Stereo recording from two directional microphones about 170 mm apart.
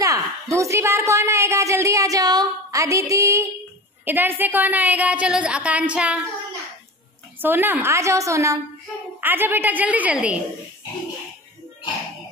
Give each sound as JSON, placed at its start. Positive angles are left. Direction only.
{"t": 0.0, "sound": "a woman's voice", "side_deg": -20}
{"t": 7.4, "sound": "a woman's voice", "side_deg": -10}